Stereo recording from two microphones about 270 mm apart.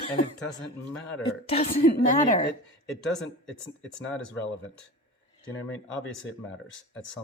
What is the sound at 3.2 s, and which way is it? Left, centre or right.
Speech, left.